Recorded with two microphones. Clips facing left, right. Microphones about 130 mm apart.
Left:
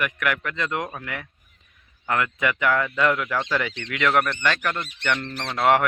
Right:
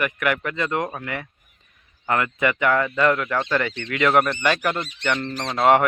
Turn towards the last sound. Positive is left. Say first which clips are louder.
# right 3 dB
turn(degrees=0)  # may be behind; listen again after turning